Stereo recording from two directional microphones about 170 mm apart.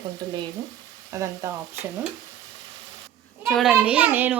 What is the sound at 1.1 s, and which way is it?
Speech, 15° right (ahead or behind).